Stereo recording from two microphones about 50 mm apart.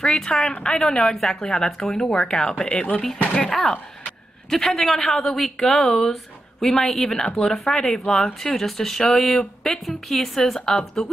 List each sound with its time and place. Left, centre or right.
0.0 s a woman's voice: centre